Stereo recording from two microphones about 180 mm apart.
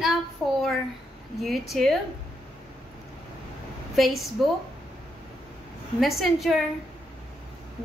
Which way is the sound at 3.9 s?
Centre (ahead or behind).